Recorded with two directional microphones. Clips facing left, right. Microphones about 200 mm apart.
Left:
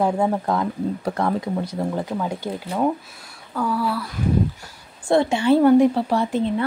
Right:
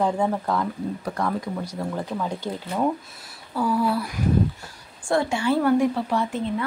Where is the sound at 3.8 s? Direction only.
20° right (ahead or behind).